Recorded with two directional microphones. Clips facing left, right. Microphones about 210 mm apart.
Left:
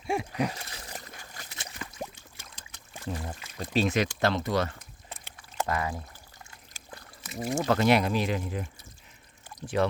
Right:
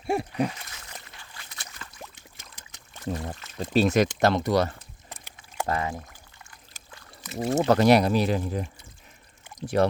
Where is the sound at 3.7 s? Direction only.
40° right (ahead or behind); by 5.9 s 25° right (ahead or behind).